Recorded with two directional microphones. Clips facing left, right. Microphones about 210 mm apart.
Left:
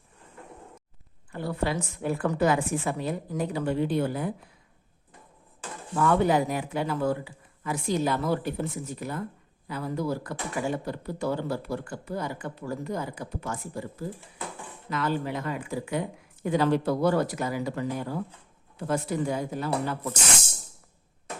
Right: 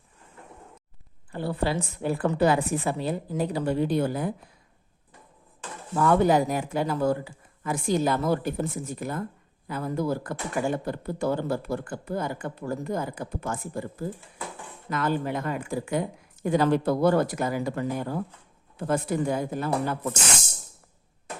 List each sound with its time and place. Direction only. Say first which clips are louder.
1.3 s a woman's voice: right 2 dB; 30° right (ahead or behind)
5.9 s speech: right 2 dB; 40° right (ahead or behind)
14.8 s speech: right 2 dB; 50° right (ahead or behind)